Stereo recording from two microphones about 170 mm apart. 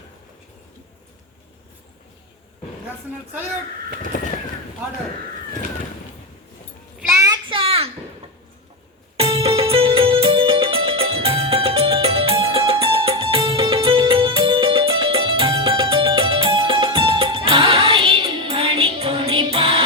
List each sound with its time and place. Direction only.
7.1 s child singing: 20° right (ahead or behind)
7.4 s a sound: 30° right (ahead or behind)
9.1 s music: 35° right (ahead or behind)